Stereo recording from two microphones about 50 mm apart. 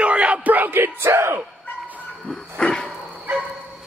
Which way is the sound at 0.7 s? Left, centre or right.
Right.